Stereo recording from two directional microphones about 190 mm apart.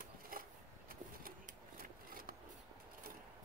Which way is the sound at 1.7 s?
50° right (ahead or behind).